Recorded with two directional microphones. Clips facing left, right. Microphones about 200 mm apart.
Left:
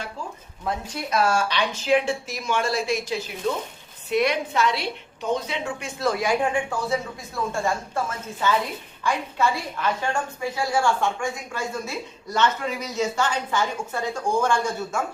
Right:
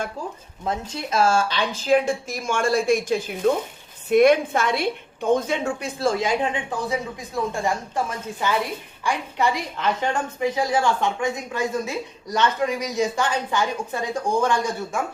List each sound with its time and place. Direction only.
0.6 s speech: 25° right (ahead or behind); by 5.7 s 50° right (ahead or behind)
5.8 s a woman's voice: 30° right (ahead or behind)